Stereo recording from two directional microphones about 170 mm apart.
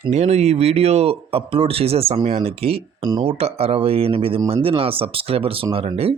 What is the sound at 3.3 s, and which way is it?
Speech, 35° right (ahead or behind).